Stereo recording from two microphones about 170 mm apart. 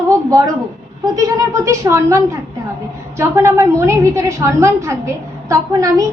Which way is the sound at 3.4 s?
15° right (ahead or behind).